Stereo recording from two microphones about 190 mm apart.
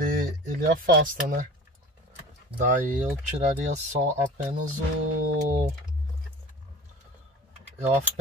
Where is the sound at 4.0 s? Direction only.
40° right (ahead or behind).